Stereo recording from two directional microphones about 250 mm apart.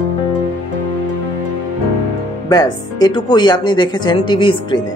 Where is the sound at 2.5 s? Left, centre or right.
Centre.